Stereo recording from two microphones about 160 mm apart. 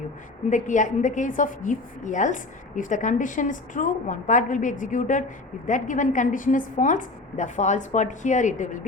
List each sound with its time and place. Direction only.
0.5 s a woman's voice: 50° left (ahead or behind)